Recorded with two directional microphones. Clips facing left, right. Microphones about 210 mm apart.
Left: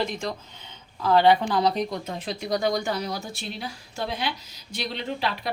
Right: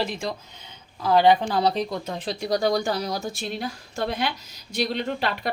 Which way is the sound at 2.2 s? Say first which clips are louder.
Right 2 dB; 35° right (ahead or behind).